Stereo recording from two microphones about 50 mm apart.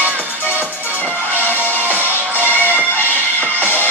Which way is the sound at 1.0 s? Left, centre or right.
Left.